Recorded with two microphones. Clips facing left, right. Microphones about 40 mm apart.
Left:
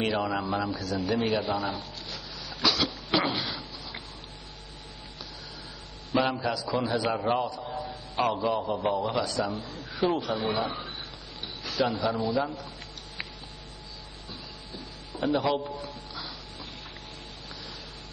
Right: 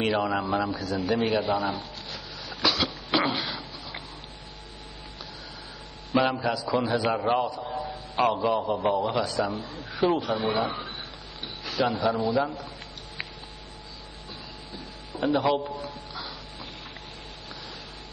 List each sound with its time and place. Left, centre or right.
0.0 s speech: centre
2.5 s cough: centre
6.1 s a man's voice: centre
7.4 s a man's voice: centre
7.7 s a man's voice: centre
15.1 s speech: centre